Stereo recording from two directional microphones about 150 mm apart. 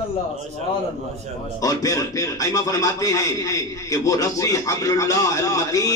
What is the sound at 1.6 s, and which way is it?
A man's voice, 25° left (ahead or behind).